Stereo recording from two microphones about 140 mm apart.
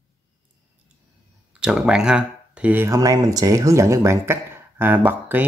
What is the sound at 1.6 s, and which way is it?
Speech, 5° right (ahead or behind).